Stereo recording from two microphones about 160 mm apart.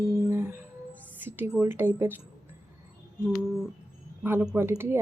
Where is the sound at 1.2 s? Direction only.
10° right (ahead or behind).